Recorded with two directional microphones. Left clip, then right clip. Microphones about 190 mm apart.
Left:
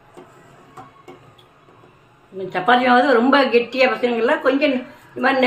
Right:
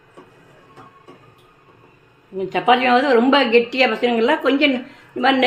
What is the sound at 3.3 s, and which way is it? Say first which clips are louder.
A woman's voice: even; 35° right (ahead or behind).